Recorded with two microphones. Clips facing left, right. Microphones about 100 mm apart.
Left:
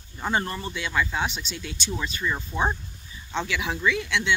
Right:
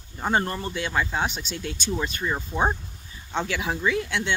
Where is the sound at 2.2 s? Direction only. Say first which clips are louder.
Even; 30° right (ahead or behind).